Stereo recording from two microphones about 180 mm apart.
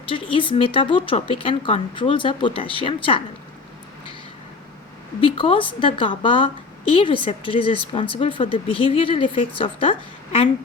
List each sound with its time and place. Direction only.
0.1 s speech: 30° left (ahead or behind)
5.2 s speech: 30° left (ahead or behind)